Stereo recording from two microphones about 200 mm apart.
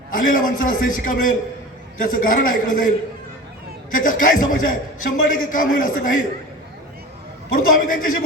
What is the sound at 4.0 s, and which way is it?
A man's voice, 40° left (ahead or behind).